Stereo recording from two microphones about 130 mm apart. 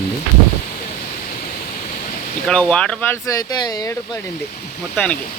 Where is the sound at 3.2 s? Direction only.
25° left (ahead or behind).